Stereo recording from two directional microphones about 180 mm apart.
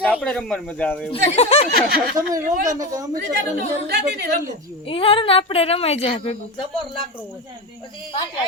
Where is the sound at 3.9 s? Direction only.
60° right (ahead or behind).